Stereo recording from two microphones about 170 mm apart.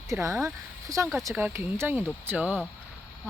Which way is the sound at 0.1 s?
15° right (ahead or behind).